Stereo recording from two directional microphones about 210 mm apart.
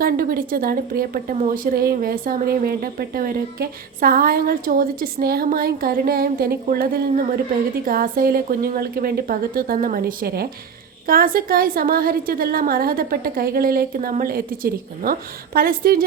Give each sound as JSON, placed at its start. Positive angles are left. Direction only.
{"t": 0.0, "sound": "a woman's voice", "side_deg": -45}